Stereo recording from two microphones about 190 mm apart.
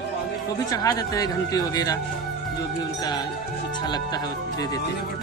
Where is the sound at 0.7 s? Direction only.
20° left (ahead or behind).